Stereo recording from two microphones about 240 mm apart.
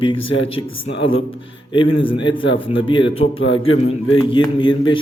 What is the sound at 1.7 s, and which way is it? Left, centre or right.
A man's voice, left.